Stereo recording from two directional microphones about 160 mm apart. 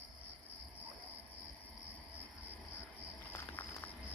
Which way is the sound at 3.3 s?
15° left (ahead or behind).